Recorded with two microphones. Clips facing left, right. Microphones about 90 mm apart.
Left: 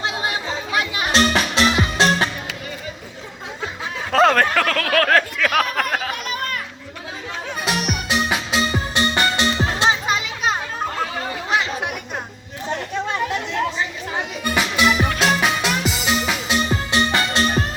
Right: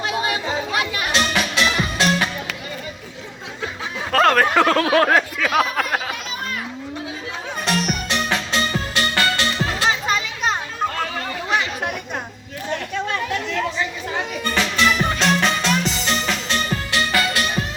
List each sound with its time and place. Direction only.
1.1 s music: 35° left (ahead or behind)
4.1 s speech: centre (ahead or behind)
4.4 s speech: 20° right (ahead or behind)
5.5 s speech: centre (ahead or behind)
7.6 s music: 10° left (ahead or behind)
10.2 s children playing: 5° left (ahead or behind)
13.1 s chatter: 20° left (ahead or behind)
14.4 s music: 10° left (ahead or behind); by 17.7 s 35° left (ahead or behind)